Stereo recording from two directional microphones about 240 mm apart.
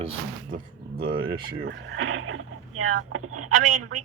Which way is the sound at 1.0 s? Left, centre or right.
Right.